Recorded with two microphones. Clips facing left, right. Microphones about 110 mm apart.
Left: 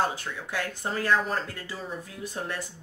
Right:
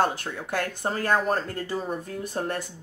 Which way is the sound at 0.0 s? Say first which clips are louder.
Right 3 dB; 60° right (ahead or behind).